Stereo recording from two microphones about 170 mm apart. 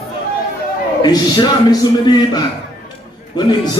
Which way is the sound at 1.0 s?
25° left (ahead or behind).